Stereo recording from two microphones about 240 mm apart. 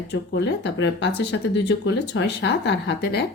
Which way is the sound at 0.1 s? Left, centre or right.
Left.